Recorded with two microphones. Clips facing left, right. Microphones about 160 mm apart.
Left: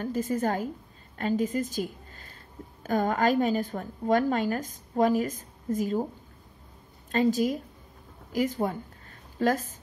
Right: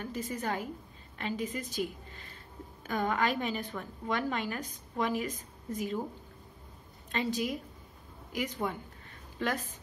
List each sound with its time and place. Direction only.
0.0 s a woman's voice: 45° left (ahead or behind)
7.1 s a woman's voice: 45° left (ahead or behind)